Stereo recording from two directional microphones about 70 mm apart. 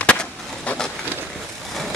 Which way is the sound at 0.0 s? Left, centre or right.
Centre.